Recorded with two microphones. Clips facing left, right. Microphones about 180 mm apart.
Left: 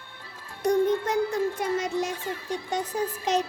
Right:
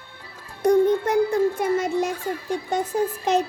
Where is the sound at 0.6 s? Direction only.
55° right (ahead or behind).